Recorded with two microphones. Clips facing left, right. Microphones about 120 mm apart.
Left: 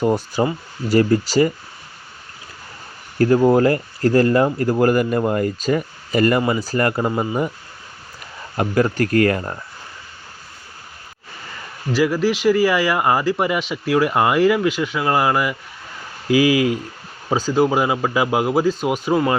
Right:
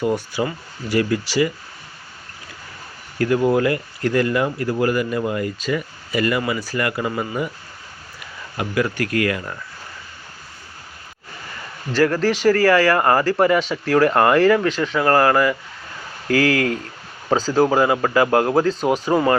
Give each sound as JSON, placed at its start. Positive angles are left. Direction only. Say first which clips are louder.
{"t": 0.0, "sound": "speech", "louder": "left 3 dB", "side_deg": 40}
{"t": 3.2, "sound": "speech", "louder": "left 4 dB", "side_deg": 35}
{"t": 8.5, "sound": "speech", "louder": "left 4 dB", "side_deg": 40}
{"t": 11.9, "sound": "speech", "louder": "right 1 dB", "side_deg": 10}
{"t": 18.8, "sound": "speech", "louder": "right 2 dB", "side_deg": -35}
{"t": 19.0, "sound": "speech", "louder": "left 1 dB", "side_deg": 0}